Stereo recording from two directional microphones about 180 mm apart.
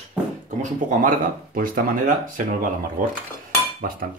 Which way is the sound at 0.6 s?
50° right (ahead or behind).